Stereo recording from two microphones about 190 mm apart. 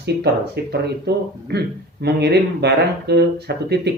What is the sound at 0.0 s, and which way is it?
Speech, 60° right (ahead or behind).